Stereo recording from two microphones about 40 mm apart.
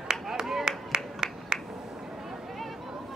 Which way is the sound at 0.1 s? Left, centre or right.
Centre.